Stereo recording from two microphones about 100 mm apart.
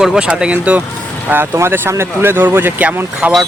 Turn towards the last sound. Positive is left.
turn(degrees=-15)  # may be behind; listen again after turning